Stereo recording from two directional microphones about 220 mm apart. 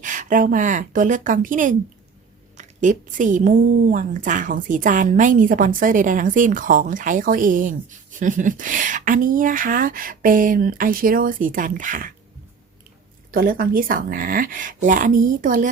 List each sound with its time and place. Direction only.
0.0 s a woman's voice: 35° right (ahead or behind)
13.3 s a woman's voice: 40° right (ahead or behind)